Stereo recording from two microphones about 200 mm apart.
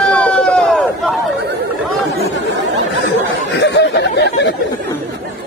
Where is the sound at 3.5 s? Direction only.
60° left (ahead or behind).